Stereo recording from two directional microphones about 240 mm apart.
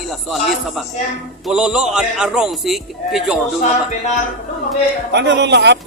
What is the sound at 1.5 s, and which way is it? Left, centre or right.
A man's voice, centre.